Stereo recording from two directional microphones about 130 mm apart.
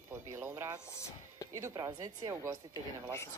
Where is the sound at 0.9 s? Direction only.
20° left (ahead or behind).